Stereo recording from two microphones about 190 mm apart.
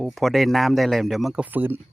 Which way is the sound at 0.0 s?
Centre (ahead or behind).